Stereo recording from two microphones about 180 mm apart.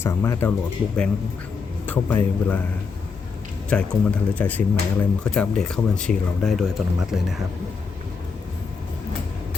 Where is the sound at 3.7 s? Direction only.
5° left (ahead or behind).